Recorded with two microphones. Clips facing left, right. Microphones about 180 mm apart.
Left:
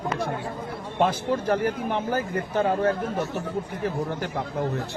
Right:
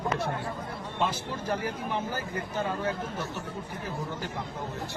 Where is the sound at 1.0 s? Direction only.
60° left (ahead or behind).